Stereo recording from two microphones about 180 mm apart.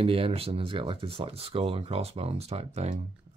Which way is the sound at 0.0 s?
30° right (ahead or behind).